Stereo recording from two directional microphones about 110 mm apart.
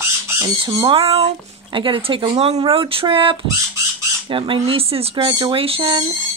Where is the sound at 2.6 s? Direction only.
50° right (ahead or behind).